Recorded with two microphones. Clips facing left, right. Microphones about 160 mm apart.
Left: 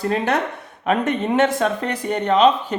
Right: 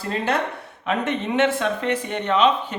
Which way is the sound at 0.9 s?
45° left (ahead or behind).